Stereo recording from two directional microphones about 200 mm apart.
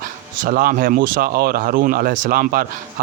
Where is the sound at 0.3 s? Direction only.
45° right (ahead or behind).